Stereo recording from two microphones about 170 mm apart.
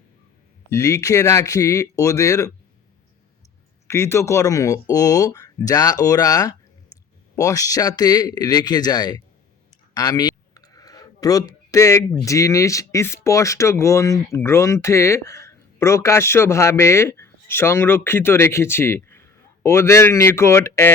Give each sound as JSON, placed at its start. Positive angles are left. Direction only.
{"t": 0.7, "sound": "speech", "side_deg": 15}
{"t": 3.8, "sound": "speech", "side_deg": 15}
{"t": 9.9, "sound": "clicking", "side_deg": 25}
{"t": 12.2, "sound": "speech", "side_deg": 20}